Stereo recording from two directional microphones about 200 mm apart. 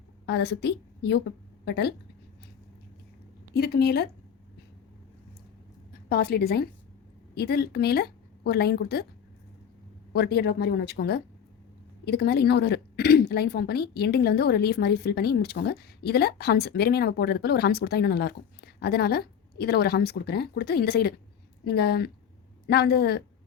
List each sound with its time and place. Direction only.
0.3 s a woman's voice: 55° left (ahead or behind)
3.5 s speech: 55° left (ahead or behind)
5.9 s a woman's voice: 50° left (ahead or behind)
10.1 s a woman's voice: 50° left (ahead or behind)